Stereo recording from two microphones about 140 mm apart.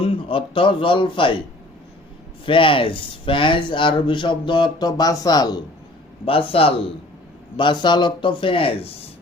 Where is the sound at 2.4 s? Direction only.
40° left (ahead or behind).